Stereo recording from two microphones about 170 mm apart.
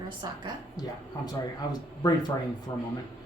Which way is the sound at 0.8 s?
25° left (ahead or behind).